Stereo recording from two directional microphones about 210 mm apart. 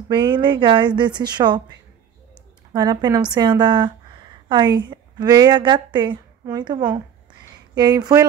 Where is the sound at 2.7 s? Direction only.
20° right (ahead or behind).